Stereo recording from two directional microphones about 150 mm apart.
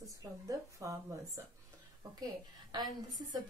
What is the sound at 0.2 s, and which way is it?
A woman's voice, 20° right (ahead or behind).